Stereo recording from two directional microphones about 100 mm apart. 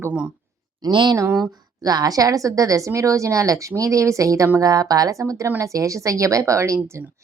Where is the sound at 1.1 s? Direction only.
30° right (ahead or behind).